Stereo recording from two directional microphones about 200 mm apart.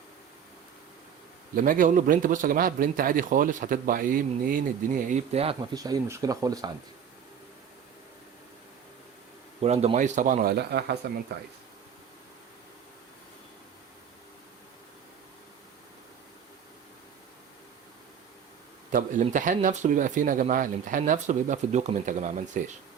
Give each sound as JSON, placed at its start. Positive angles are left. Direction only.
{"t": 1.5, "sound": "speech", "side_deg": -45}
{"t": 5.7, "sound": "speech", "side_deg": -20}
{"t": 9.6, "sound": "speech", "side_deg": -30}
{"t": 18.9, "sound": "speech", "side_deg": -40}